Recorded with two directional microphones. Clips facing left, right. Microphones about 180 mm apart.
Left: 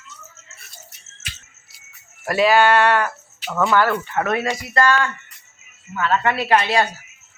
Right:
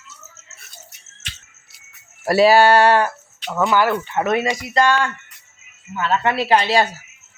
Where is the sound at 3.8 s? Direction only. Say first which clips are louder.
Right 2 dB; 15° right (ahead or behind).